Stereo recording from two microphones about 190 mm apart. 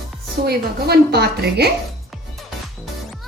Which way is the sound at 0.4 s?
55° right (ahead or behind).